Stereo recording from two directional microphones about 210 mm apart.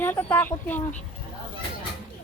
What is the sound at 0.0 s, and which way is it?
Speech, 10° left (ahead or behind).